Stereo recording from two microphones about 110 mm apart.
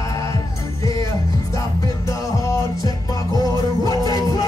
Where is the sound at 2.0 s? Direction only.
30° left (ahead or behind).